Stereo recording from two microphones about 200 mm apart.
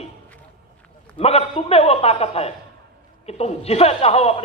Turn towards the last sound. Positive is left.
turn(degrees=30)  # may be behind; listen again after turning